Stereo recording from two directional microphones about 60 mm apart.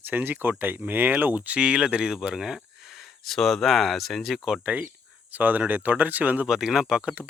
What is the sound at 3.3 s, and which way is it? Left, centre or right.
Speech, centre.